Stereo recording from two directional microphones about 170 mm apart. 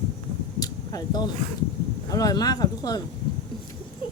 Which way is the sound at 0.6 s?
20° left (ahead or behind).